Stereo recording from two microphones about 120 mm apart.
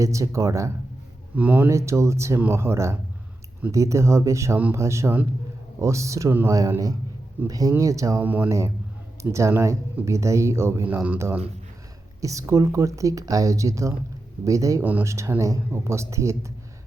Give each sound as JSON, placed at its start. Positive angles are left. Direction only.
{"t": 0.0, "sound": "speech", "side_deg": -25}
{"t": 1.4, "sound": "speech", "side_deg": -15}
{"t": 8.2, "sound": "speech", "side_deg": -15}
{"t": 12.2, "sound": "speech", "side_deg": -25}